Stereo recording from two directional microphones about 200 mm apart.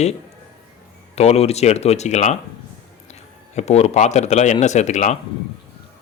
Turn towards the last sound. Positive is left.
turn(degrees=35)  # may be behind; listen again after turning